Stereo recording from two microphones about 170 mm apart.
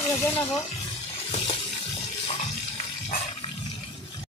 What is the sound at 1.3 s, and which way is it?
Water, 30° left (ahead or behind).